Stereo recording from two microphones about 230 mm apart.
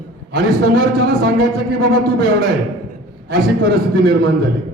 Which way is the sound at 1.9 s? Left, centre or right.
Right.